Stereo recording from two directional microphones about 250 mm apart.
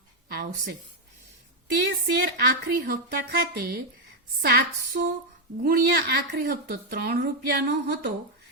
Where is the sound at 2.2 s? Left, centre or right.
Right.